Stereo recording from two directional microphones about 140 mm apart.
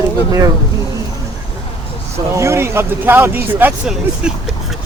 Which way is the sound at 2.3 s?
20° right (ahead or behind).